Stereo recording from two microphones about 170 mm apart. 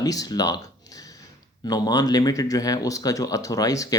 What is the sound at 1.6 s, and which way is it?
Speech, 20° left (ahead or behind).